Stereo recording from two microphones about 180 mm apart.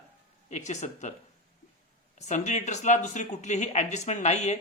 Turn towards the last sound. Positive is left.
turn(degrees=40)  # may be behind; listen again after turning